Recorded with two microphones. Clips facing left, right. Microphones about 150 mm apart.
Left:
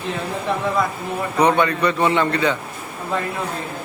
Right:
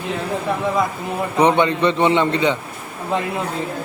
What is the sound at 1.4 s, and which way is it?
A man's voice, 20° right (ahead or behind).